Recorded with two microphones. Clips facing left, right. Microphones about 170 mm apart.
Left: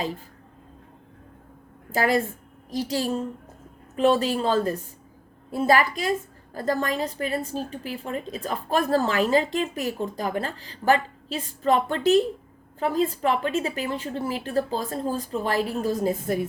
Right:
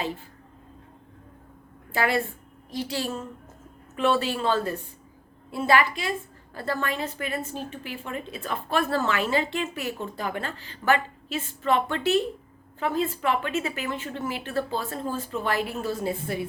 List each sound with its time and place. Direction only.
1.9 s a woman's voice: 40° left (ahead or behind)